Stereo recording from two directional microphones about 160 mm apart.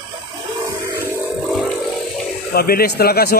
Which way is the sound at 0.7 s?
15° right (ahead or behind).